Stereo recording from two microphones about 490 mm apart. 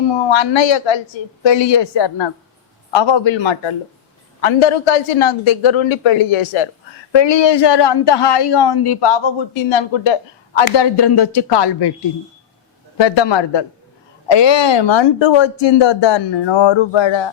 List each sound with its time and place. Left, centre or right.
0.1 s speech: left
4.4 s a man's voice: left
7.1 s a woman's voice: left
13.0 s speech: left